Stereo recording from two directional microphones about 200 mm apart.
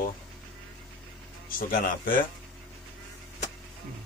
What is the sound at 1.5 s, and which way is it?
Speech, 45° left (ahead or behind).